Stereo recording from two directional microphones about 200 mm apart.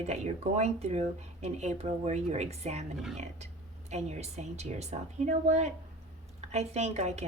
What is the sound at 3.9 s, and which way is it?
Speech, 35° right (ahead or behind).